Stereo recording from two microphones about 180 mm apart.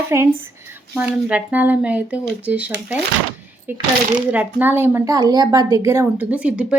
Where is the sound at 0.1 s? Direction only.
15° right (ahead or behind).